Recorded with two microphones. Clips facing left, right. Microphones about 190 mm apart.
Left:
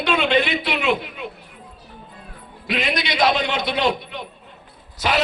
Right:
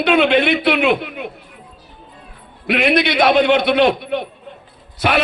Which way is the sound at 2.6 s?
60° right (ahead or behind).